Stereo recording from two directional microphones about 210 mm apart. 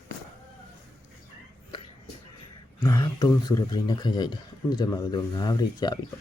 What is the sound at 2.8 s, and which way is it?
Speech, 20° left (ahead or behind).